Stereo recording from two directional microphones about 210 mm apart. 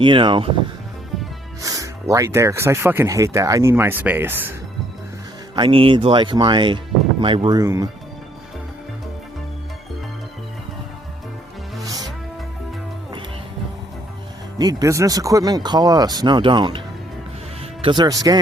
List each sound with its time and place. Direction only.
0.0 s speech: 25° right (ahead or behind)
1.6 s speech: 15° right (ahead or behind)
5.5 s speech: 25° right (ahead or behind)
11.8 s music: 15° right (ahead or behind)
14.6 s speech: 15° right (ahead or behind)
17.8 s speech: 20° right (ahead or behind)